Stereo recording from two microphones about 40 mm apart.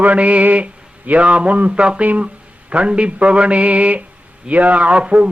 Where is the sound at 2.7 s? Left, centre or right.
Right.